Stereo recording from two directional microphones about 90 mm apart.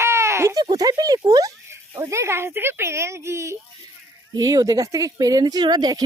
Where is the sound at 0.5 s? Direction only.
50° right (ahead or behind).